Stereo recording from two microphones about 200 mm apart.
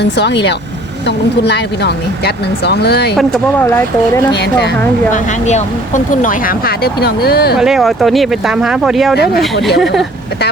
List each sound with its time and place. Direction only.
0.2 s speech: 60° left (ahead or behind)
3.2 s speech: centre (ahead or behind)
5.1 s speech: 35° left (ahead or behind)
7.6 s speech: centre (ahead or behind)
9.1 s speech: 55° left (ahead or behind)
9.7 s speech: centre (ahead or behind)